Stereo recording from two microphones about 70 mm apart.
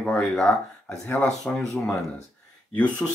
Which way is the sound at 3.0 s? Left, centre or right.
Centre.